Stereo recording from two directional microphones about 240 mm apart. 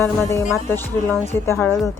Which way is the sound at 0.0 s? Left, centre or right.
Centre.